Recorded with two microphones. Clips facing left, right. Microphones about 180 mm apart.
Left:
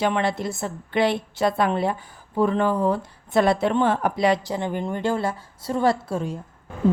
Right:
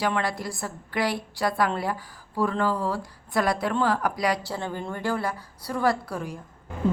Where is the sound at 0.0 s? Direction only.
25° left (ahead or behind).